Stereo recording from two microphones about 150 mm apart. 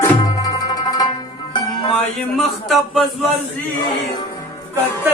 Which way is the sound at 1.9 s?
Centre (ahead or behind).